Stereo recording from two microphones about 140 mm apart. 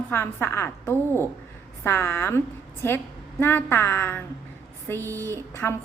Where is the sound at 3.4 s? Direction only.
15° left (ahead or behind).